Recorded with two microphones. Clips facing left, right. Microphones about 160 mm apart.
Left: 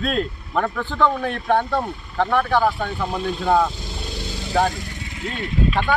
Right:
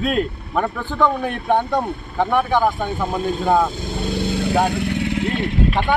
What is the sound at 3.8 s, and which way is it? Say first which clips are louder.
Vehicle: right 9 dB; 55° right (ahead or behind).